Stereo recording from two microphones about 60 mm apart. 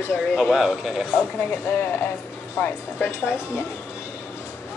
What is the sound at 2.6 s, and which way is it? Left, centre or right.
Speech, left.